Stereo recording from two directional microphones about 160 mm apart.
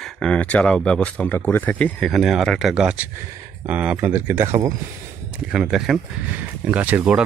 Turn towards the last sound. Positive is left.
turn(degrees=-10)  # may be behind; listen again after turning